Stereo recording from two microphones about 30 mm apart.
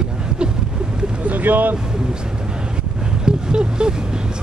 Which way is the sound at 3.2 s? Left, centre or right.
Right.